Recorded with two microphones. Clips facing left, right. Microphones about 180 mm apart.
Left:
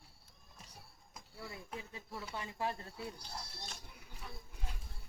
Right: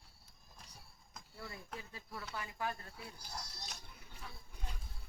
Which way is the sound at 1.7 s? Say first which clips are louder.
Left 4 dB; 20° left (ahead or behind).